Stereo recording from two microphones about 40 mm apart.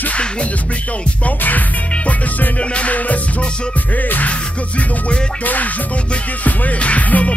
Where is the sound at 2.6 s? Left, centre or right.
Left.